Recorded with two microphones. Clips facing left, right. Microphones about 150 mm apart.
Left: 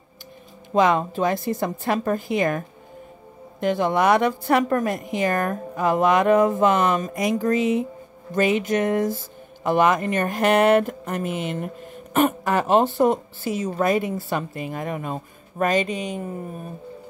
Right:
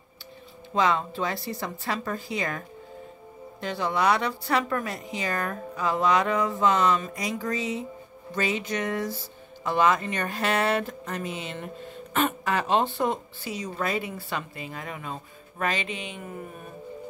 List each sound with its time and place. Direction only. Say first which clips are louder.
0.7 s a woman's voice: left 6 dB; 50° left (ahead or behind)
3.6 s a woman's voice: left 6 dB; 50° left (ahead or behind)